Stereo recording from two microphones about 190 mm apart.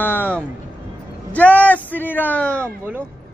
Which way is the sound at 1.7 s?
10° left (ahead or behind).